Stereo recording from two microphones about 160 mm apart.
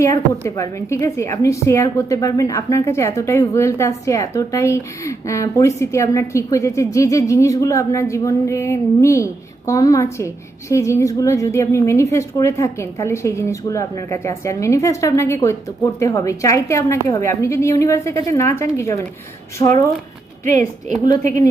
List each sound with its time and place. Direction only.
0.0 s a woman's voice: 20° left (ahead or behind)
20.4 s a woman's voice: 50° right (ahead or behind)
21.0 s a woman's voice: 25° left (ahead or behind)